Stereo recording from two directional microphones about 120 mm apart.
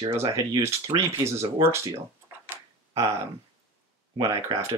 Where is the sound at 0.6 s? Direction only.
20° right (ahead or behind).